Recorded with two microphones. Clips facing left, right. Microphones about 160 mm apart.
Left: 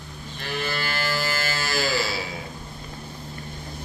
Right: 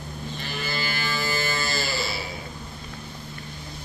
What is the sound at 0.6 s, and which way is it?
Music, 65° left (ahead or behind).